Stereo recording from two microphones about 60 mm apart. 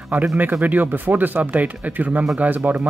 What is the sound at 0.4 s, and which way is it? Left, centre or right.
Speech, right.